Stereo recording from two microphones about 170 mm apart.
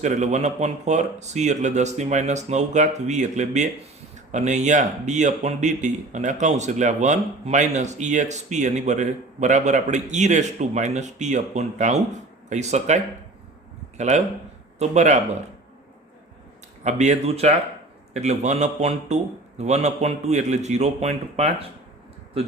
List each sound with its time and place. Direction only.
0.0 s a man's voice: 45° right (ahead or behind)
16.8 s a man's voice: 40° right (ahead or behind)